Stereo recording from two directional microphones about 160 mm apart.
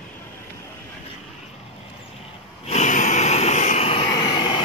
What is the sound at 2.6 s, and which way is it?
Snort, 45° left (ahead or behind).